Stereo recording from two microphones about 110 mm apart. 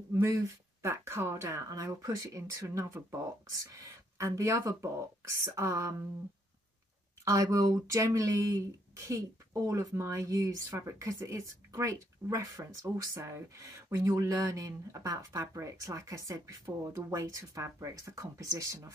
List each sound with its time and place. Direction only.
0.1 s speech: 25° right (ahead or behind)
7.2 s speech: 30° right (ahead or behind)